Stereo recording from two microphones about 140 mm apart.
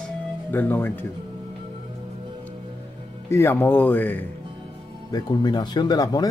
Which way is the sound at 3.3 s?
15° left (ahead or behind).